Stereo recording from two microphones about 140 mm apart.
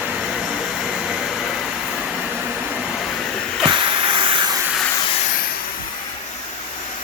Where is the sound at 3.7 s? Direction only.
35° right (ahead or behind).